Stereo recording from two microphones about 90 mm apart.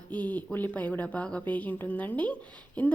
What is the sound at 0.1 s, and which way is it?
Speech, 15° left (ahead or behind).